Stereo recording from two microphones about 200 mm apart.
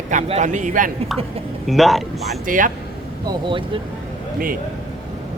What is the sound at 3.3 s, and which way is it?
Speech, 25° right (ahead or behind).